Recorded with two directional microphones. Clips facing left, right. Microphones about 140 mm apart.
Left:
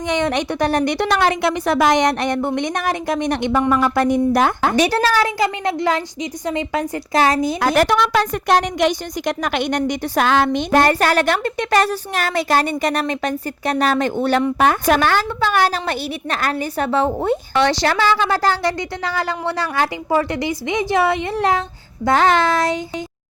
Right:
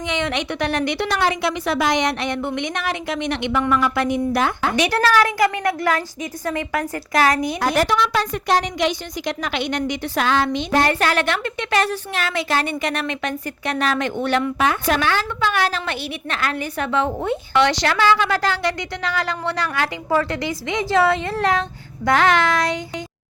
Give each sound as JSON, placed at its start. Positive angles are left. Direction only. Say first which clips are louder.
{"t": 0.1, "sound": "a woman's voice", "louder": "left 5 dB", "side_deg": 40}
{"t": 4.9, "sound": "a woman's voice", "louder": "even", "side_deg": 30}
{"t": 7.8, "sound": "a woman's voice", "louder": "left 4 dB", "side_deg": 60}
{"t": 14.6, "sound": "a woman's voice", "louder": "left 4 dB", "side_deg": 45}